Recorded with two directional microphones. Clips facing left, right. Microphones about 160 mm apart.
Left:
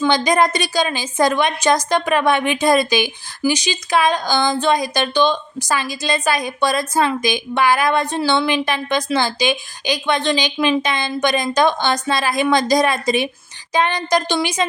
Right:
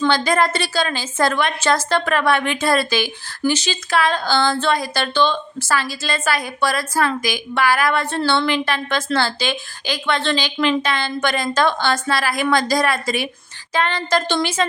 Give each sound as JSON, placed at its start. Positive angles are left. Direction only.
{"t": 0.3, "sound": "a woman's voice", "side_deg": 15}